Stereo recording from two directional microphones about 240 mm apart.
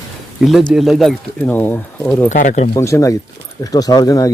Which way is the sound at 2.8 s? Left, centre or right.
Centre.